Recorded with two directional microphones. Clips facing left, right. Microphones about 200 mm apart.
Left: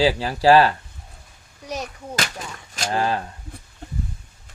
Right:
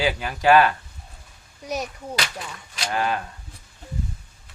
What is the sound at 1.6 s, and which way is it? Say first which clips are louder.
Speech: right 2 dB; 10° right (ahead or behind).